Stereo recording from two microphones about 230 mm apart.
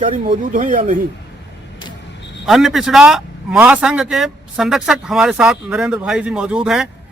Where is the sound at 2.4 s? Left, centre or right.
Centre.